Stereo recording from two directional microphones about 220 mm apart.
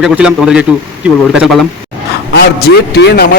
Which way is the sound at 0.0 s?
5° right (ahead or behind).